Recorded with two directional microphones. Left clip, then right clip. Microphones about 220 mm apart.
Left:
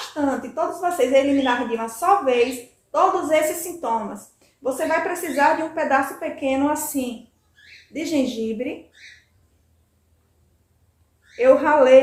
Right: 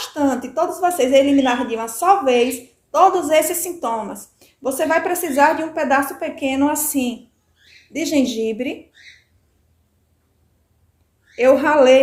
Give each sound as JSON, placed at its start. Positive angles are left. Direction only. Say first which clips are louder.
{"t": 0.2, "sound": "a woman's voice", "louder": "right 4 dB", "side_deg": -45}
{"t": 11.3, "sound": "a woman's voice", "louder": "right 2 dB", "side_deg": -45}